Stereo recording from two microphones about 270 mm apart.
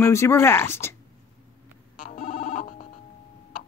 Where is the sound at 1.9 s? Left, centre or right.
Left.